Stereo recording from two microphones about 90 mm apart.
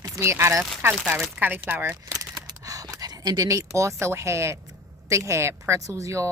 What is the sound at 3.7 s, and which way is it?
Speech, 35° right (ahead or behind).